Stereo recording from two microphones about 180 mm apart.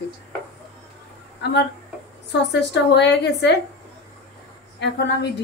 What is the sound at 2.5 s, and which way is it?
A woman's voice, 70° left (ahead or behind).